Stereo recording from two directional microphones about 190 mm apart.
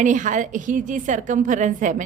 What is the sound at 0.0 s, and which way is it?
A woman's voice, 40° right (ahead or behind).